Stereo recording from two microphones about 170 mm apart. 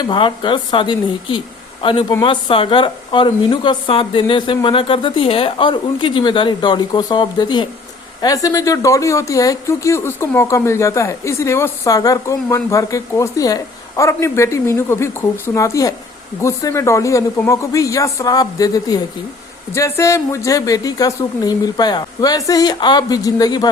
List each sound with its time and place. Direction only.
0.1 s a woman's voice: 30° left (ahead or behind)